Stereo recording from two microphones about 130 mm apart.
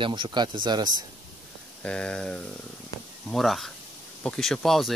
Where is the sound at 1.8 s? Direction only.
5° left (ahead or behind).